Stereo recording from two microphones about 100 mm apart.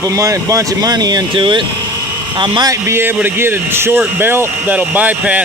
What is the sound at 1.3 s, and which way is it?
Speech, 55° right (ahead or behind).